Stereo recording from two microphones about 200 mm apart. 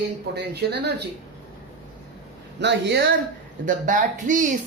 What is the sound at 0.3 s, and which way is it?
Speech, 55° right (ahead or behind).